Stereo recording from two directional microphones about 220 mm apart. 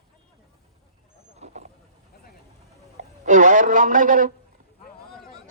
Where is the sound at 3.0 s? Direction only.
35° right (ahead or behind).